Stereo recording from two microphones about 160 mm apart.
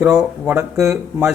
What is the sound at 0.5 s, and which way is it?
Speech, 20° right (ahead or behind).